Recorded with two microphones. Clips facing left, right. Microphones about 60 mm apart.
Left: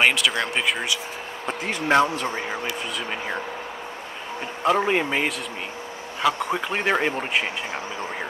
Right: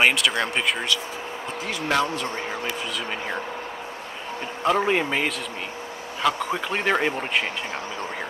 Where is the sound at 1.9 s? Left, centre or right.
Left.